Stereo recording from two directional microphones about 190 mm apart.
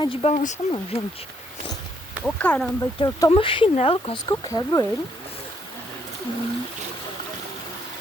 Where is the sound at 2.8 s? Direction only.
20° left (ahead or behind).